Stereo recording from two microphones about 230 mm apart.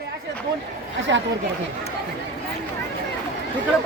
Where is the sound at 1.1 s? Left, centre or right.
Right.